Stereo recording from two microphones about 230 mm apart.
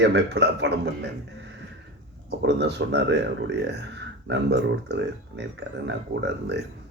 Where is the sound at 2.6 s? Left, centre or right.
Right.